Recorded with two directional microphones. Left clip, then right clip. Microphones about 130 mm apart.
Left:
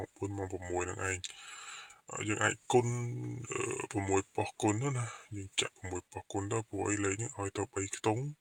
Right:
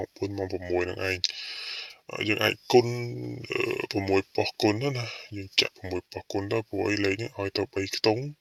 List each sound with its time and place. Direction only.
0.2 s speech: 30° right (ahead or behind)